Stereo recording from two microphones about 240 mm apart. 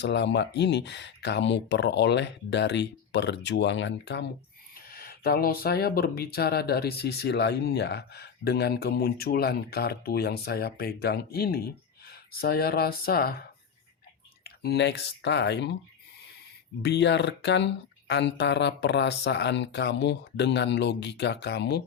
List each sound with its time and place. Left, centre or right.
0.0 s speech: left
14.4 s speech: left
16.8 s speech: left